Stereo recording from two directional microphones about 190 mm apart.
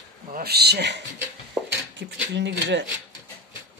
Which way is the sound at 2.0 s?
65° right (ahead or behind).